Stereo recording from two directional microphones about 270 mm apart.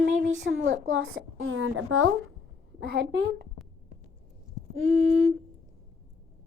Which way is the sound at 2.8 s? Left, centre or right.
Right.